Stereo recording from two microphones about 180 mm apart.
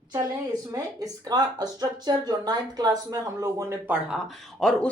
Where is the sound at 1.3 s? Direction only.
20° right (ahead or behind).